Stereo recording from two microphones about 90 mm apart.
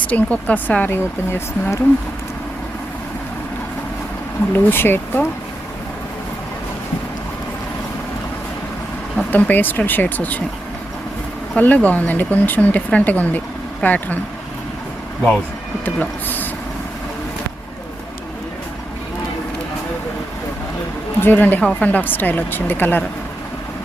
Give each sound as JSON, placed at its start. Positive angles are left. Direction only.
{"t": 0.1, "sound": "speech", "side_deg": 15}
{"t": 4.5, "sound": "speech", "side_deg": 25}
{"t": 9.3, "sound": "speech", "side_deg": 20}
{"t": 11.5, "sound": "speech", "side_deg": 15}
{"t": 15.8, "sound": "speech", "side_deg": 20}
{"t": 21.2, "sound": "speech", "side_deg": 20}